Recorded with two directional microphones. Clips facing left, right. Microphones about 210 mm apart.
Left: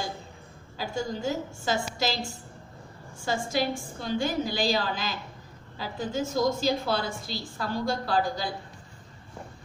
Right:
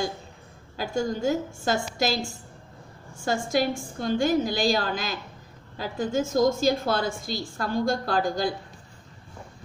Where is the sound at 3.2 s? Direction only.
50° right (ahead or behind).